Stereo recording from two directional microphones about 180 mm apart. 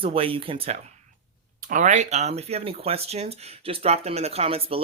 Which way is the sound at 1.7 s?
45° right (ahead or behind).